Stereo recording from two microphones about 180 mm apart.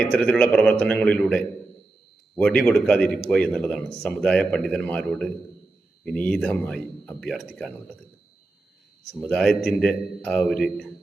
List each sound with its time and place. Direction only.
0.0 s a man's voice: 5° left (ahead or behind)
9.2 s speech: 5° left (ahead or behind)